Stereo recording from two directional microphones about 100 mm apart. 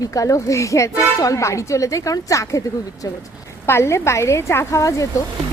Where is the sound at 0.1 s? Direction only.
35° left (ahead or behind).